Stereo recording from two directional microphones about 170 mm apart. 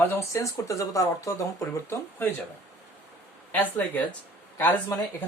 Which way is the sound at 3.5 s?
10° left (ahead or behind).